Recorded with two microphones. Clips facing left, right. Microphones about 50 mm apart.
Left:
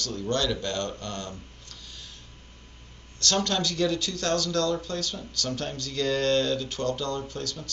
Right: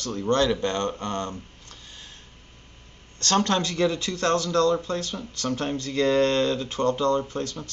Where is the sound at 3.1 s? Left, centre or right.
Right.